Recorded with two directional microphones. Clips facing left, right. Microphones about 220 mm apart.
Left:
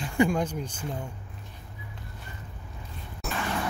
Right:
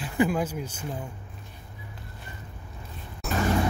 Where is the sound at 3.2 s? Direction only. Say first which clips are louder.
Right 4 dB; centre (ahead or behind).